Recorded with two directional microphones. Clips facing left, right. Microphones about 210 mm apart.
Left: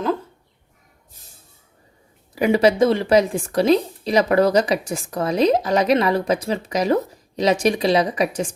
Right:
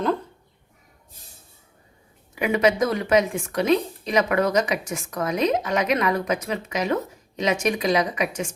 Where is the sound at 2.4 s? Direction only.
35° left (ahead or behind).